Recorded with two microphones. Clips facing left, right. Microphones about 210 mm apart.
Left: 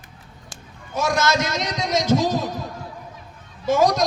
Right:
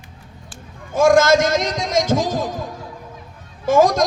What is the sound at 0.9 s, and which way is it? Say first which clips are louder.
A man's voice: right 8 dB; 50° right (ahead or behind).